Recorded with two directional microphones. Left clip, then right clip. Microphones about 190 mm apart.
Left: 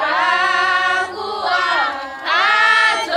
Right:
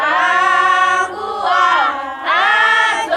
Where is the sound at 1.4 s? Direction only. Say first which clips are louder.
Right 4 dB; 55° right (ahead or behind).